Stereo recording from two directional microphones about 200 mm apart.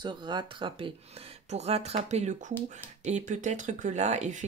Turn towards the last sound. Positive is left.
turn(degrees=-35)  # may be behind; listen again after turning